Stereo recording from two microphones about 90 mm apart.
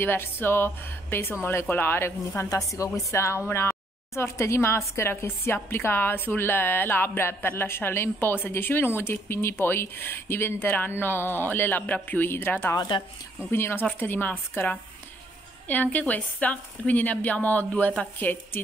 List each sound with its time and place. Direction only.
0.0 s a woman's voice: 25° left (ahead or behind)